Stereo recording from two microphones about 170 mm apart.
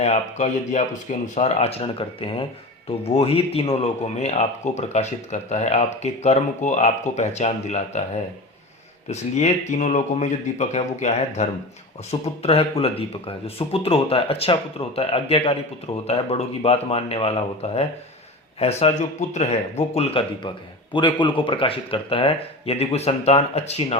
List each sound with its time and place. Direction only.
0.0 s speech: 40° left (ahead or behind)